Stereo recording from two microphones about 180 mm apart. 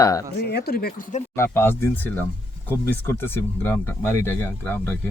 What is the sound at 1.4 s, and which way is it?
Speech, 15° left (ahead or behind).